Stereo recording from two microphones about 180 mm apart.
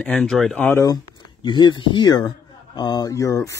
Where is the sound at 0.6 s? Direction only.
15° left (ahead or behind).